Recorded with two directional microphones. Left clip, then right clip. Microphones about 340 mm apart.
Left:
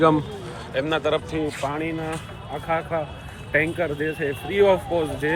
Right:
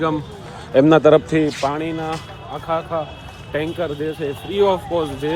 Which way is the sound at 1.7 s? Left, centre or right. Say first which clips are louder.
Right 4 dB; centre.